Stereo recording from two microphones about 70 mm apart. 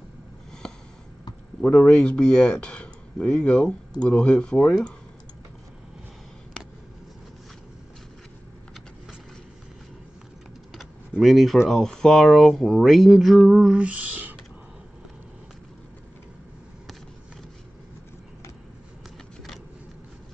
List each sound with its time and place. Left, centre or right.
0.5 s snort: centre
1.6 s speech: left
2.0 s speech: centre
10.7 s speech: centre; by 14.3 s right